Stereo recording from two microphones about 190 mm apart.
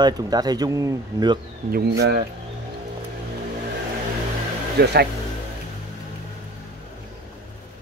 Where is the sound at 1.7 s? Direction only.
60° right (ahead or behind).